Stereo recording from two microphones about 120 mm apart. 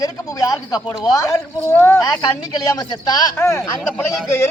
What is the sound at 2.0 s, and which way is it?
Speech, 30° left (ahead or behind).